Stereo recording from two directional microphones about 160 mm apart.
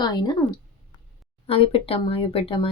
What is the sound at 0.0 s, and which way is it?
Speech, 25° left (ahead or behind).